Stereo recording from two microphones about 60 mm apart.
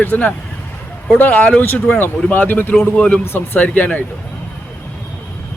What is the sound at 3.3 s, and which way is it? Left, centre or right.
Speech, left.